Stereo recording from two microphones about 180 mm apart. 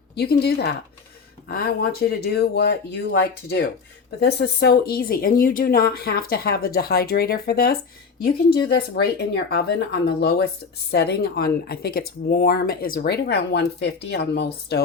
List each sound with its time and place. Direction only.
0.4 s speech: 60° left (ahead or behind)